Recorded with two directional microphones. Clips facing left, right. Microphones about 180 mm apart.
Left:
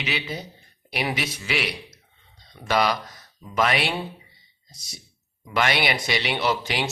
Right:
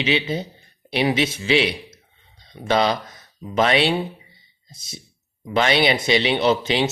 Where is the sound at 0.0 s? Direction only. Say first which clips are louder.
Right 8 dB; 25° right (ahead or behind).